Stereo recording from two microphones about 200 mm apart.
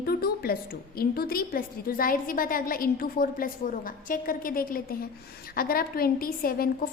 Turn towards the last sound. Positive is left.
turn(degrees=45)  # may be behind; listen again after turning